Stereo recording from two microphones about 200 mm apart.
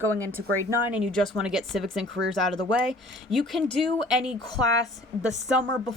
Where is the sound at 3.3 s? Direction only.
Centre (ahead or behind).